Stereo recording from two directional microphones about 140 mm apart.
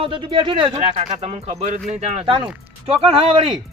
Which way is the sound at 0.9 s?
50° right (ahead or behind).